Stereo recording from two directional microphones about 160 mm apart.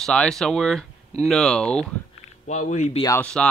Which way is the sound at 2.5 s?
45° left (ahead or behind).